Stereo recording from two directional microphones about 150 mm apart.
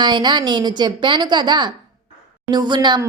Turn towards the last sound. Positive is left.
turn(degrees=-30)  # may be behind; listen again after turning